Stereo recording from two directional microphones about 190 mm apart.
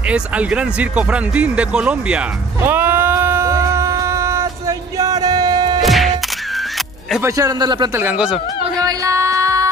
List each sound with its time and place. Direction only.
0.1 s music: 5° right (ahead or behind); by 5.8 s 20° right (ahead or behind)
5.8 s music: centre (ahead or behind)
7.1 s a man's voice: 10° right (ahead or behind)
8.0 s a man's voice: 5° right (ahead or behind)
8.7 s music: 20° right (ahead or behind)